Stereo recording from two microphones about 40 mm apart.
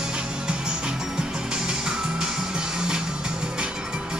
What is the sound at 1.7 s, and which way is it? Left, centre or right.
Music, centre.